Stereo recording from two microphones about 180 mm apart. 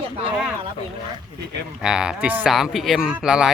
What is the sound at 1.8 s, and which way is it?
Speech, 5° right (ahead or behind).